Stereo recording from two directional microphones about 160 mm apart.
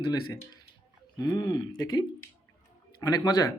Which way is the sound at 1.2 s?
25° left (ahead or behind).